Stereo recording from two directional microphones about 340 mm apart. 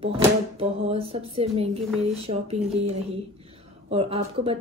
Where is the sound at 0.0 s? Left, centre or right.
Centre.